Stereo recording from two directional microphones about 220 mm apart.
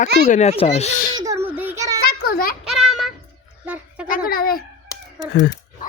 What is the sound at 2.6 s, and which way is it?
Child singing, centre (ahead or behind).